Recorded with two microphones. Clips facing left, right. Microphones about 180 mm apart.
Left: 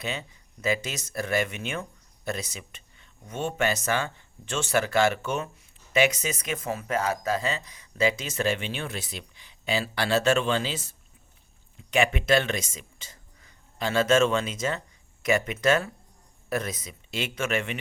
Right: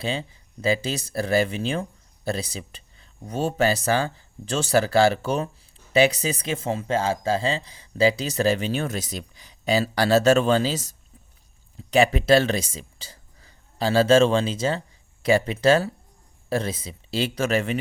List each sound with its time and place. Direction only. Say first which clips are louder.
0.0 s speech: right 5 dB; 30° right (ahead or behind)